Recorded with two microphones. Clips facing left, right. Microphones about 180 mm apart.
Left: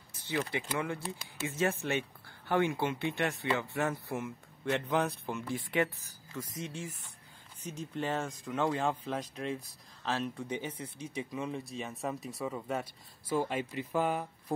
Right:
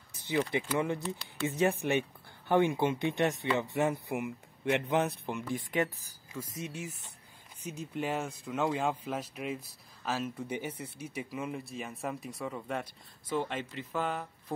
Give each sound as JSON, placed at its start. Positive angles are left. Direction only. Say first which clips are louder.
{"t": 0.3, "sound": "speech", "louder": "right 4 dB", "side_deg": -20}
{"t": 5.8, "sound": "speech", "louder": "left 1 dB", "side_deg": -35}
{"t": 6.3, "sound": "speech", "louder": "even", "side_deg": -10}